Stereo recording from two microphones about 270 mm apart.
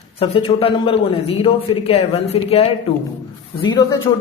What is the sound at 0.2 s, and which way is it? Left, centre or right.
A man's voice, centre.